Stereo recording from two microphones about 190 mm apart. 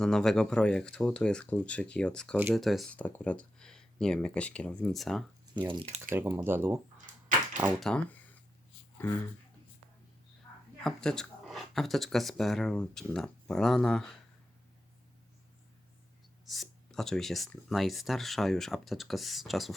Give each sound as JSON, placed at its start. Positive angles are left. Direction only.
{"t": 0.0, "sound": "speech", "side_deg": 5}
{"t": 5.5, "sound": "speech", "side_deg": -25}
{"t": 6.0, "sound": "speech", "side_deg": -10}
{"t": 7.6, "sound": "speech", "side_deg": 0}
{"t": 10.8, "sound": "speech", "side_deg": 5}
{"t": 16.5, "sound": "speech", "side_deg": 0}